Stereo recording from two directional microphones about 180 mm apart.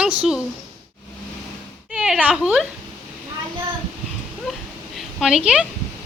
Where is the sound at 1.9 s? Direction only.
5° right (ahead or behind).